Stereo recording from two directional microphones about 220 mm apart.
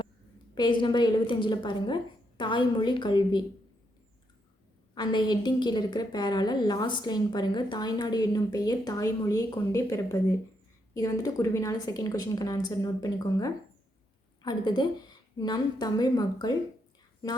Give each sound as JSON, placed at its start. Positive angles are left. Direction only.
{"t": 0.5, "sound": "a woman's voice", "side_deg": 20}
{"t": 4.9, "sound": "a woman's voice", "side_deg": 20}